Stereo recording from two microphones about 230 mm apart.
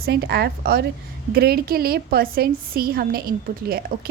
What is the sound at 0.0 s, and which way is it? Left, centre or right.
A woman's voice, right.